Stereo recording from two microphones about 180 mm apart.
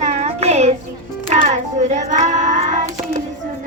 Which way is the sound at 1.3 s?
35° right (ahead or behind).